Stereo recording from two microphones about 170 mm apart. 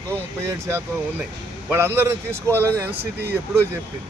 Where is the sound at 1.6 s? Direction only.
15° right (ahead or behind).